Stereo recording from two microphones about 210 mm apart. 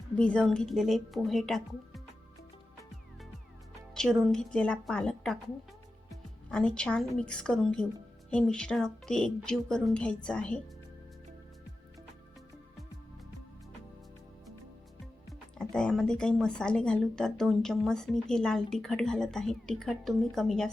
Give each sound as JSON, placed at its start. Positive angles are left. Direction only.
{"t": 0.2, "sound": "speech", "side_deg": 5}
{"t": 3.9, "sound": "speech", "side_deg": 0}
{"t": 6.1, "sound": "music", "side_deg": 5}
{"t": 6.7, "sound": "speech", "side_deg": 5}
{"t": 15.3, "sound": "speech", "side_deg": 5}